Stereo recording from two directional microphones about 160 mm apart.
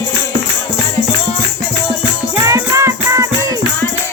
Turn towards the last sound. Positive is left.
turn(degrees=-20)  # may be behind; listen again after turning